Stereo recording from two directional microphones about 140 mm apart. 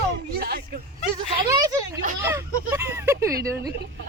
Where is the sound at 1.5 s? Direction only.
25° right (ahead or behind).